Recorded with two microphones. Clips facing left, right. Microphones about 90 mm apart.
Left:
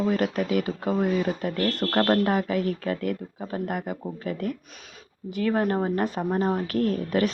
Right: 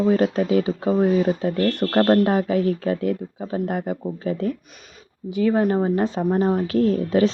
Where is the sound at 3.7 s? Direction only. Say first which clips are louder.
Right 5 dB; 30° right (ahead or behind).